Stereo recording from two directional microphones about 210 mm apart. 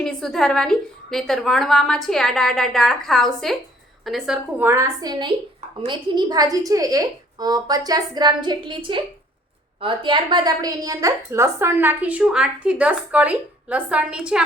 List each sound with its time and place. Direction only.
0.0 s a woman's voice: 5° left (ahead or behind)